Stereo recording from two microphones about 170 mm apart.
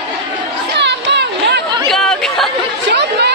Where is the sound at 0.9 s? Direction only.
85° right.